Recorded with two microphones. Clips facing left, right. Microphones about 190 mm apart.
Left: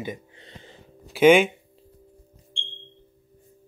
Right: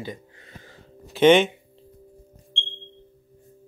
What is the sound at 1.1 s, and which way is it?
Speech, 10° left (ahead or behind).